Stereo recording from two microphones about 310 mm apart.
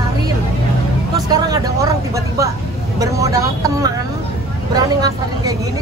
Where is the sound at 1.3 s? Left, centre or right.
Centre.